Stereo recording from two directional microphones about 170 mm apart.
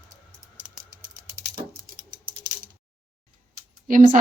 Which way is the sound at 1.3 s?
15° right (ahead or behind).